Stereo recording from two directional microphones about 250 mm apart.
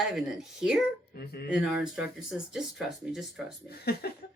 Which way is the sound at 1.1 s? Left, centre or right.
Left.